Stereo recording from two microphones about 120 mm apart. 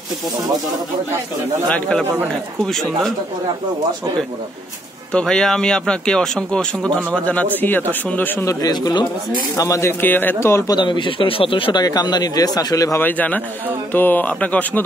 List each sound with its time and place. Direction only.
1.7 s speech: 10° left (ahead or behind)
5.1 s speech: 5° left (ahead or behind)
8.5 s a man's voice: 30° left (ahead or behind)
10.7 s speech: 40° left (ahead or behind)
11.8 s a man's voice: 35° left (ahead or behind)
13.0 s speech: 15° left (ahead or behind)